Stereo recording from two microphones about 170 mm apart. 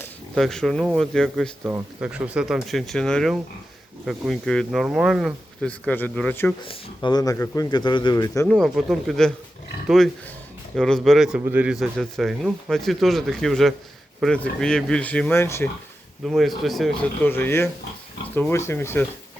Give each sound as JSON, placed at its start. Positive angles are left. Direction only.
{"t": 0.3, "sound": "speech", "side_deg": 0}
{"t": 6.6, "sound": "speech", "side_deg": 30}
{"t": 8.4, "sound": "speech", "side_deg": 0}
{"t": 16.2, "sound": "speech", "side_deg": 0}